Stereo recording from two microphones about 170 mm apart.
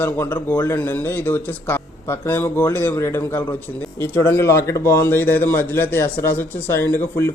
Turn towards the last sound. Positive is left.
turn(degrees=15)  # may be behind; listen again after turning